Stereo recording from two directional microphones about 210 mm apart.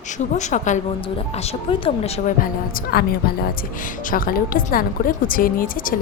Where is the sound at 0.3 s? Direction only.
35° left (ahead or behind).